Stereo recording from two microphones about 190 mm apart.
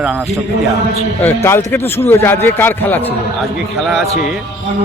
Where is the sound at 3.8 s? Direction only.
Centre (ahead or behind).